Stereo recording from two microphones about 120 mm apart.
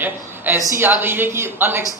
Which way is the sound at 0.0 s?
15° right (ahead or behind).